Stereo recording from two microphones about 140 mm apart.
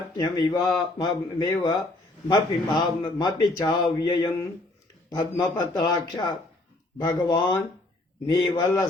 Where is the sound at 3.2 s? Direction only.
30° left (ahead or behind).